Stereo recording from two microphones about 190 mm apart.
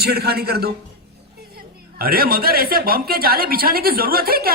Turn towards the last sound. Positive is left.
turn(degrees=-50)  # may be behind; listen again after turning